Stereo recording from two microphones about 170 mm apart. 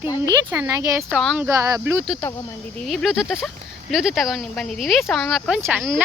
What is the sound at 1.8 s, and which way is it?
Speech, 10° right (ahead or behind).